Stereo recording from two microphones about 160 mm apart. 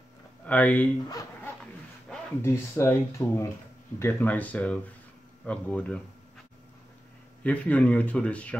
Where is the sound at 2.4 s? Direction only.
15° left (ahead or behind).